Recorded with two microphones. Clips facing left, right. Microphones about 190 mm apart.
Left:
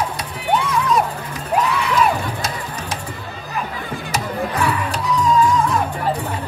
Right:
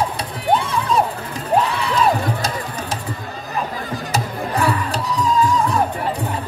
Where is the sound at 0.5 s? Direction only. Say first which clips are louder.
Even; 35° right (ahead or behind).